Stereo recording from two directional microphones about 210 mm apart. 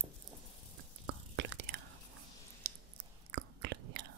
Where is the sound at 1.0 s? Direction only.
60° right (ahead or behind).